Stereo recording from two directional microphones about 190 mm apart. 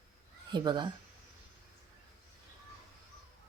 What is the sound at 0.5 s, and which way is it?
Speech, 25° right (ahead or behind).